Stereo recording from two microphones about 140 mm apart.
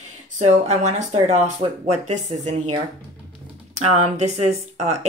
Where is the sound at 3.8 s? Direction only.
50° right (ahead or behind).